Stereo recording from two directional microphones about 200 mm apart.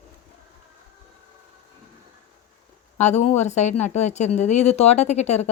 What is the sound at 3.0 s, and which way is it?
Speech, 35° left (ahead or behind).